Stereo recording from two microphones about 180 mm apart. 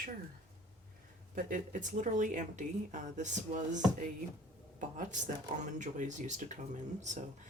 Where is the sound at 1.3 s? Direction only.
45° right (ahead or behind).